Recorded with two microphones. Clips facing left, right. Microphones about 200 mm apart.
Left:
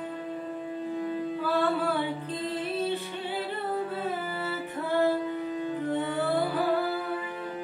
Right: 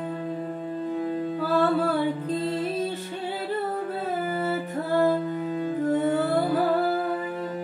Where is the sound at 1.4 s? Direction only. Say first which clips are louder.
Right 5 dB; 45° right (ahead or behind).